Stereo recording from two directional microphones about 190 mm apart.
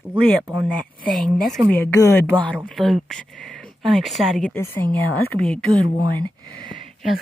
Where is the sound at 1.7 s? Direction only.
10° left (ahead or behind).